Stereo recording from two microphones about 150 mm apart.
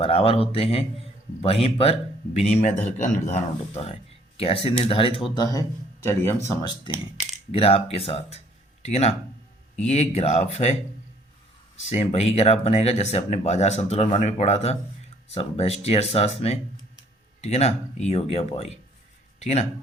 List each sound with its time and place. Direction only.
0.0 s speech: 40° left (ahead or behind)
2.5 s speech: 55° left (ahead or behind); by 6.7 s 15° left (ahead or behind)
7.5 s speech: 40° left (ahead or behind)
11.9 s speech: 45° left (ahead or behind)